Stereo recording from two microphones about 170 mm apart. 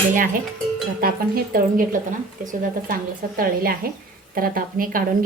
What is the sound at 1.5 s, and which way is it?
A woman's voice, 55° right (ahead or behind).